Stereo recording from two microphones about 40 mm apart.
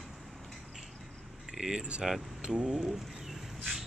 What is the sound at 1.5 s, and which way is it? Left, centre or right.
Speech, centre.